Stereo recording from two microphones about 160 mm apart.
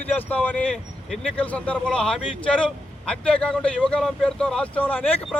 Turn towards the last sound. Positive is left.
turn(degrees=10)  # may be behind; listen again after turning